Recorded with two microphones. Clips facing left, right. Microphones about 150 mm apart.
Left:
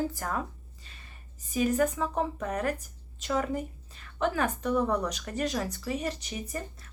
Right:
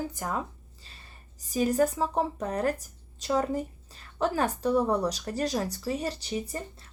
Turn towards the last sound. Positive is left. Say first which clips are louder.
# right 2 dB
turn(degrees=-30)  # may be behind; listen again after turning